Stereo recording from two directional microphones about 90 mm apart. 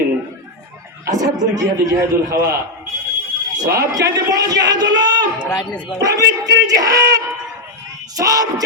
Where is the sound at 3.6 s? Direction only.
40° right (ahead or behind).